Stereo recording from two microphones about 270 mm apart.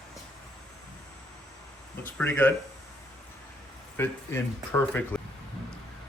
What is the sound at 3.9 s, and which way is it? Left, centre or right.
A man's voice, centre.